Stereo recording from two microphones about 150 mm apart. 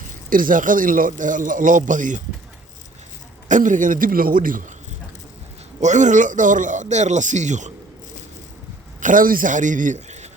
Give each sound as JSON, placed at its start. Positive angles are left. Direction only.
{"t": 0.3, "sound": "a man's voice", "side_deg": -65}
{"t": 3.5, "sound": "a man's voice", "side_deg": -60}
{"t": 5.8, "sound": "a man's voice", "side_deg": -55}
{"t": 9.0, "sound": "a man's voice", "side_deg": -60}